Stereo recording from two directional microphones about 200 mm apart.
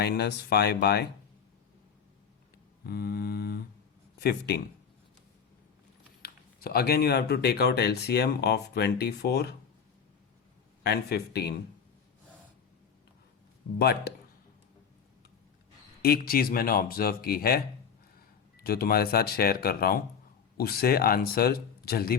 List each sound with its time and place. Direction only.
0.0 s speech: 55° left (ahead or behind)
2.8 s a sound: 50° left (ahead or behind)
4.2 s speech: 55° left (ahead or behind)
6.2 s speech: 50° left (ahead or behind)
10.8 s speech: 55° left (ahead or behind)
13.7 s speech: 55° left (ahead or behind)
16.0 s speech: 50° left (ahead or behind)